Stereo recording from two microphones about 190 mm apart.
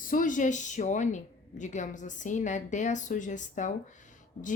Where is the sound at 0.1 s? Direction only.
45° left (ahead or behind).